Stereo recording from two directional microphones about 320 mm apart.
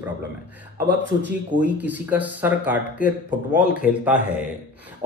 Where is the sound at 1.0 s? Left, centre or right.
Right.